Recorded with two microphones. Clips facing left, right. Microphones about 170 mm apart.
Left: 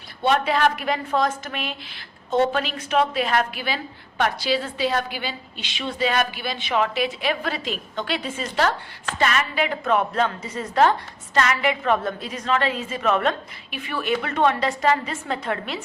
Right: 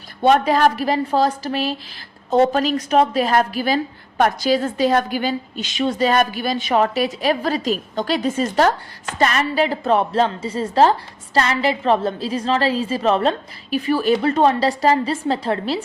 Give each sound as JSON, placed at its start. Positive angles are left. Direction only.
{"t": 0.2, "sound": "a woman's voice", "side_deg": -45}